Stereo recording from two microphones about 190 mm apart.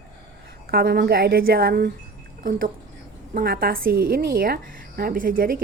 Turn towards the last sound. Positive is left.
turn(degrees=-50)  # may be behind; listen again after turning